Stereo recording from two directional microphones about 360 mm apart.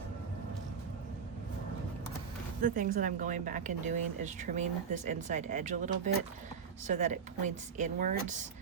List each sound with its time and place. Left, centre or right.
2.6 s speech: right